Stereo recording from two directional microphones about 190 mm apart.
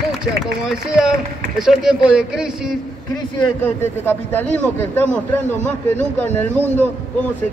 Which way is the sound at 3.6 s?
10° left (ahead or behind).